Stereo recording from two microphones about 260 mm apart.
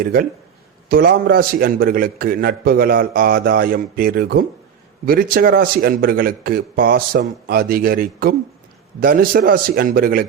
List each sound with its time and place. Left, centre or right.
0.0 s a man's voice: right